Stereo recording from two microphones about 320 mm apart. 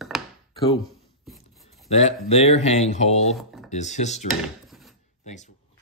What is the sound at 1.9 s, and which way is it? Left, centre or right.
Speech, centre.